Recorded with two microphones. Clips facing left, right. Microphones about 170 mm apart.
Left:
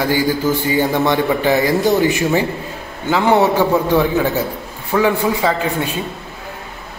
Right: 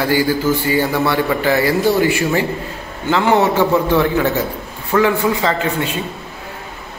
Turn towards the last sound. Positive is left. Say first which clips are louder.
# even
turn(degrees=15)  # may be behind; listen again after turning